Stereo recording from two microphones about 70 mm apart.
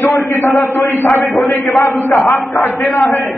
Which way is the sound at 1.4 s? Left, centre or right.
Centre.